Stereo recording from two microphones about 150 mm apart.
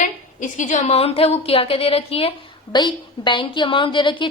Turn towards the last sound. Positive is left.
turn(degrees=30)  # may be behind; listen again after turning